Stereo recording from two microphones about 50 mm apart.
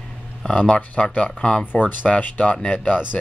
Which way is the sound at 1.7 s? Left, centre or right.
Left.